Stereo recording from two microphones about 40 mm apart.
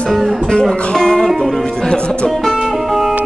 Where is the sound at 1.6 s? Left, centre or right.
Centre.